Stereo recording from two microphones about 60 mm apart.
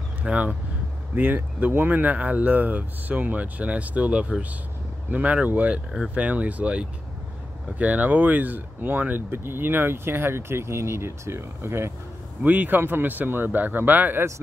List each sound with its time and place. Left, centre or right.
0.2 s speech: centre
1.1 s speech: right
12.4 s speech: right